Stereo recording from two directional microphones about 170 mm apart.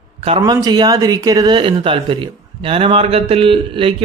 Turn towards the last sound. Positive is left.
turn(degrees=-30)  # may be behind; listen again after turning